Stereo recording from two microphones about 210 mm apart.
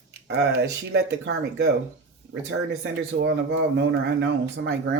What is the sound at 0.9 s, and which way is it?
Speech, 55° right (ahead or behind).